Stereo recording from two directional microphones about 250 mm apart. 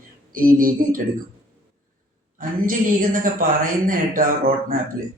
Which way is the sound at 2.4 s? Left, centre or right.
Right.